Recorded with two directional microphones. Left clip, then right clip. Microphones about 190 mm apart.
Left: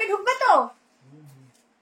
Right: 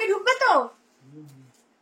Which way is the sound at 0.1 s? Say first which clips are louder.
Right 5 dB; 20° right (ahead or behind).